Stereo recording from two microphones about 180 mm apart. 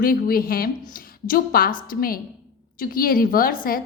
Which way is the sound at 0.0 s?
55° left (ahead or behind).